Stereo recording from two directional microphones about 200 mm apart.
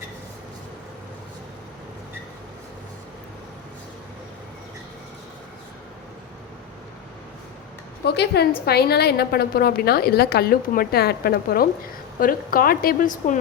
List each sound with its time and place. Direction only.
8.0 s a woman's voice: 55° left (ahead or behind)